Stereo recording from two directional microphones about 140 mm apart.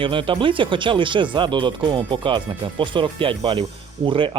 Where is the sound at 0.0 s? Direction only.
35° right (ahead or behind).